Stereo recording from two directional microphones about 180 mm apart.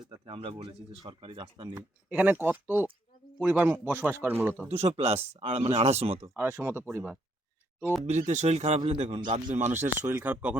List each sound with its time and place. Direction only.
0.3 s speech: 30° right (ahead or behind)
2.0 s a man's voice: 10° right (ahead or behind)
4.7 s a man's voice: 35° right (ahead or behind)
6.2 s a man's voice: 10° right (ahead or behind)
8.2 s a man's voice: 40° right (ahead or behind)
9.6 s a man's voice: 10° right (ahead or behind)